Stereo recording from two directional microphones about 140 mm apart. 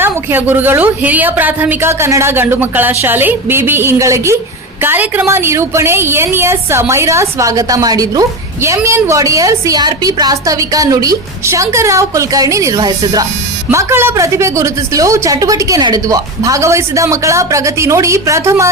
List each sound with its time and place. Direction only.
0.0 s a woman's voice: 15° right (ahead or behind)